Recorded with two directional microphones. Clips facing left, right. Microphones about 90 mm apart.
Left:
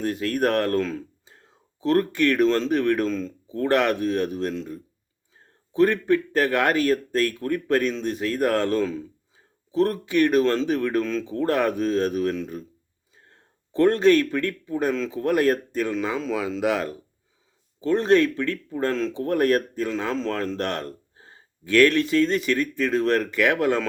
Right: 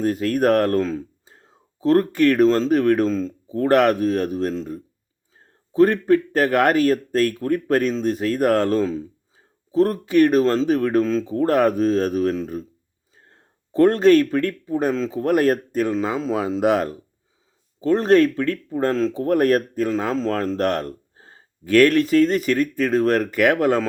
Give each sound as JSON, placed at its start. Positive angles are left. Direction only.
{"t": 0.0, "sound": "speech", "side_deg": -40}
{"t": 13.7, "sound": "speech", "side_deg": -40}